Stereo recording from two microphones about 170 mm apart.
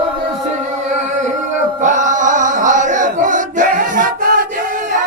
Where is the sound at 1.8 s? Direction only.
50° right (ahead or behind).